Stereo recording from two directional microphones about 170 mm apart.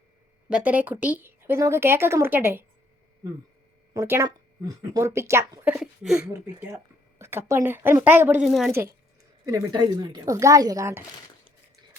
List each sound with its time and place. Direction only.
0.5 s speech: 10° right (ahead or behind)
3.9 s speech: 15° right (ahead or behind)
9.5 s a woman's voice: 25° right (ahead or behind)